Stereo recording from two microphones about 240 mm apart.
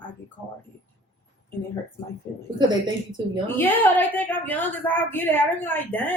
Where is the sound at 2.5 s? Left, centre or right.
Centre.